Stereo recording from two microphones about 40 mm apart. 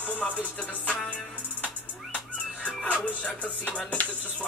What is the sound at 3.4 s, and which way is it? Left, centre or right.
Music, left.